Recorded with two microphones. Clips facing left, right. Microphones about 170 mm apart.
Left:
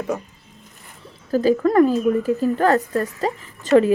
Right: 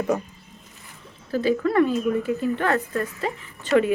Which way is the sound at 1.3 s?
40° left (ahead or behind).